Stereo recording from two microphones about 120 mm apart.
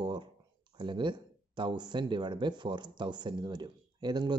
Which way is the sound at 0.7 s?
40° right (ahead or behind).